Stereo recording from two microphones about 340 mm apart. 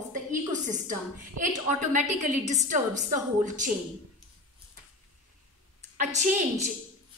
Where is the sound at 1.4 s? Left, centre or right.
Right.